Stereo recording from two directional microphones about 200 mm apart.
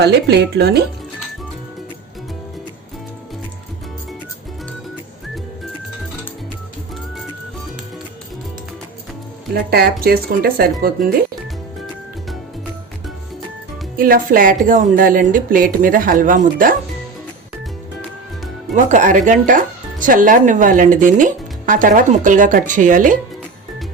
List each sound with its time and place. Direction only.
0.0 s speech: 55° right (ahead or behind)
9.6 s a woman's voice: 50° right (ahead or behind)
14.0 s a woman's voice: 45° right (ahead or behind)
18.7 s speech: 40° right (ahead or behind)